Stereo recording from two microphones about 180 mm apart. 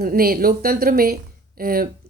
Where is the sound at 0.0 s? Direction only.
55° right (ahead or behind).